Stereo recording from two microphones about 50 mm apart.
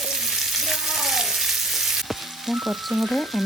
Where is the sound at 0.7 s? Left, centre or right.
Centre.